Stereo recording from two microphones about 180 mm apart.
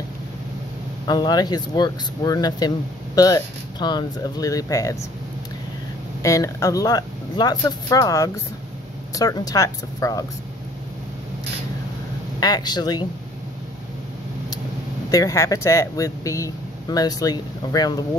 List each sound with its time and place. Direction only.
1.0 s speech: 20° left (ahead or behind)
6.2 s speech: 15° left (ahead or behind)
12.4 s speech: 20° left (ahead or behind)
15.0 s speech: 20° left (ahead or behind)